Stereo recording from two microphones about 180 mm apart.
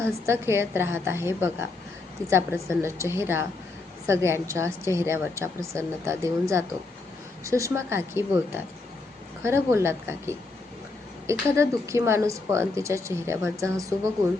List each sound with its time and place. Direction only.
0.0 s speech: 15° right (ahead or behind)